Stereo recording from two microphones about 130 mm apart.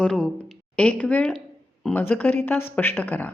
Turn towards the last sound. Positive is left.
turn(degrees=15)  # may be behind; listen again after turning